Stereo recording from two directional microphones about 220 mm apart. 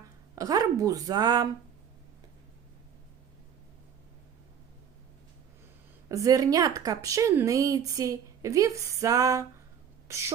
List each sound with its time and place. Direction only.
0.3 s speech: 15° right (ahead or behind)
6.1 s speech: 15° right (ahead or behind)